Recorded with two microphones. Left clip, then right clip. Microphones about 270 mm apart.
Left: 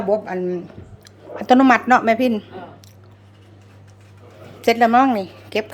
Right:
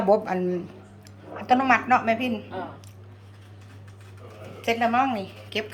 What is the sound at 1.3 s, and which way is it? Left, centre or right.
A woman's voice, left.